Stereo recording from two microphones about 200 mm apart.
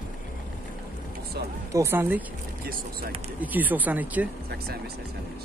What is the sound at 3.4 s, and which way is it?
Speech, 10° right (ahead or behind).